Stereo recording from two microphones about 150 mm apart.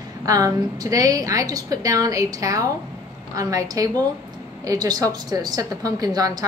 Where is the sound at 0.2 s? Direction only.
25° right (ahead or behind).